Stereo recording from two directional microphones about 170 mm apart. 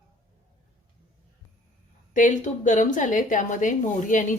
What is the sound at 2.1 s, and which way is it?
A woman's voice, 50° left (ahead or behind).